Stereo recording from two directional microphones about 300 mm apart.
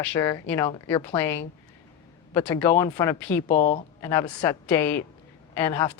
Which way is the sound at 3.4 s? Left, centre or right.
Left.